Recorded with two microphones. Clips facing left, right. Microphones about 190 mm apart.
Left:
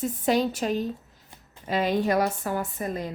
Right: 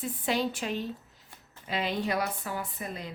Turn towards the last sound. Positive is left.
turn(degrees=45)  # may be behind; listen again after turning